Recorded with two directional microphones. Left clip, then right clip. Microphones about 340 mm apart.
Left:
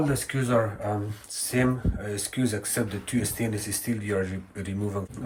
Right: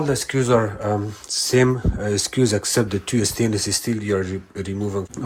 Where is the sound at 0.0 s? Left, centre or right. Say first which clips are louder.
Right 7 dB; centre.